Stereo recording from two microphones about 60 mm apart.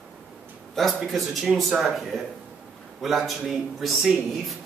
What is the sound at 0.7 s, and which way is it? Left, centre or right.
A man's voice, centre.